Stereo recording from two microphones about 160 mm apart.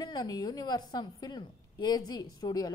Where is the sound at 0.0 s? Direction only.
25° left (ahead or behind).